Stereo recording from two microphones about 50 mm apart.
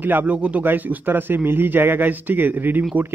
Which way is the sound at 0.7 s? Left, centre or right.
Right.